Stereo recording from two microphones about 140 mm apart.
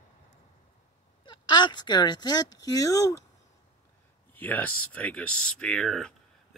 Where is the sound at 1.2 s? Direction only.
35° left (ahead or behind).